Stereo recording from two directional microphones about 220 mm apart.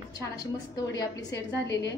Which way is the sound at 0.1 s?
15° left (ahead or behind).